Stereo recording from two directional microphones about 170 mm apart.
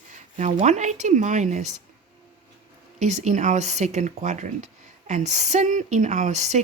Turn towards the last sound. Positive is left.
turn(degrees=-45)  # may be behind; listen again after turning